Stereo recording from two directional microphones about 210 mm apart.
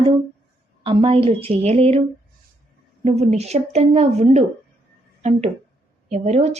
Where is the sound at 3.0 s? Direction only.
30° right (ahead or behind).